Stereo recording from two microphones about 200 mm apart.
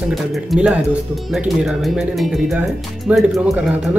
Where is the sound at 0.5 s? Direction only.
5° right (ahead or behind).